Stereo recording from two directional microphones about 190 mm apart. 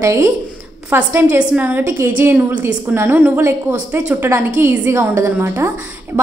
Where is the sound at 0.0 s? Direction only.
15° right (ahead or behind).